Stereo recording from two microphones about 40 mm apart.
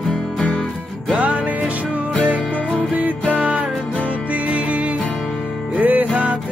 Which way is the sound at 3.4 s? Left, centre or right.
Right.